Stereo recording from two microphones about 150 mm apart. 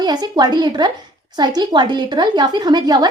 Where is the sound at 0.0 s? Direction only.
30° right (ahead or behind).